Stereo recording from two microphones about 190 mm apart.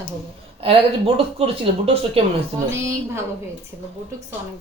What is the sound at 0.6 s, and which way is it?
Speech, 30° right (ahead or behind).